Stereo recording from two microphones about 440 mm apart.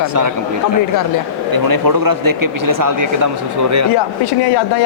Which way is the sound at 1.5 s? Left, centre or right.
Right.